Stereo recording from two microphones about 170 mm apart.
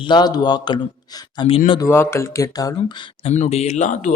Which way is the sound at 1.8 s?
15° left (ahead or behind).